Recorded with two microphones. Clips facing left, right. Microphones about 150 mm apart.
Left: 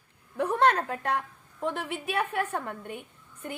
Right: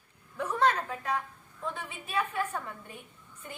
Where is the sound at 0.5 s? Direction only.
60° left (ahead or behind).